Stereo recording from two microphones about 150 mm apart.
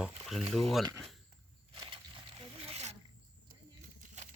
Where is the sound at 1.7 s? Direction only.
35° right (ahead or behind).